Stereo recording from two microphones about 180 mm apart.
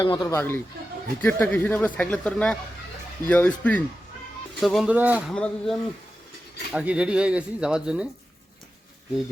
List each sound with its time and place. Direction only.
0.0 s speech: 20° left (ahead or behind); by 5.2 s 10° right (ahead or behind)
5.3 s speech: 5° left (ahead or behind)